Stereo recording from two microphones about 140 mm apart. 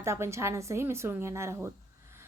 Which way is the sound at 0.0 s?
20° right (ahead or behind).